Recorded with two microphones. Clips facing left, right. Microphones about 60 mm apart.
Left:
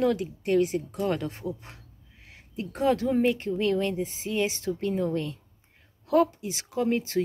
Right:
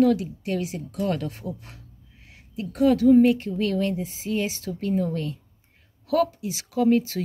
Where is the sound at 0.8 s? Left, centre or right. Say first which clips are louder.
Right 1 dB; left.